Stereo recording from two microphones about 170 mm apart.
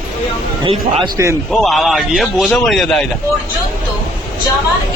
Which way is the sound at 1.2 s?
20° right (ahead or behind).